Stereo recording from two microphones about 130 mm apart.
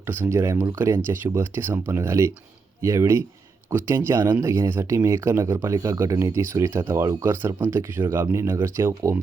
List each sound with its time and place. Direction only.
0.0 s speech: 20° right (ahead or behind)